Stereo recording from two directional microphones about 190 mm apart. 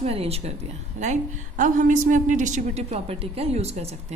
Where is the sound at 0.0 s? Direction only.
30° right (ahead or behind).